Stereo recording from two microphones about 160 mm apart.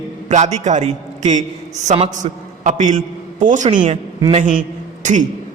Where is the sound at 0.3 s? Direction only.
45° right (ahead or behind).